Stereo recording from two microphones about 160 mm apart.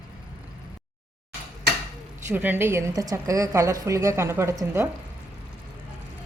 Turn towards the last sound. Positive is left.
turn(degrees=-15)  # may be behind; listen again after turning